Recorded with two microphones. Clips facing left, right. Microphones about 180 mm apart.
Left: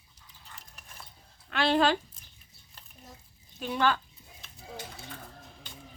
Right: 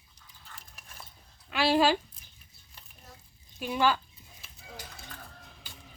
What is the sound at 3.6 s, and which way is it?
Speech, 10° right (ahead or behind).